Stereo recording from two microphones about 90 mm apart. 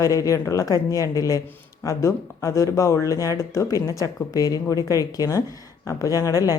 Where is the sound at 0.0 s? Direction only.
40° left (ahead or behind).